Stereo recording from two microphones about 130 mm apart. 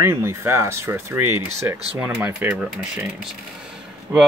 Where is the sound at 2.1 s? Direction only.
10° right (ahead or behind).